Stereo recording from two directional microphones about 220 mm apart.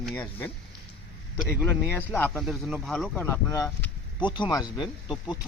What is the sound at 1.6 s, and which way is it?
Speech, 10° left (ahead or behind).